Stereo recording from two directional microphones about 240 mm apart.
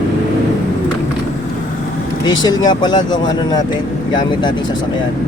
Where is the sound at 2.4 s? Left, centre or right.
Centre.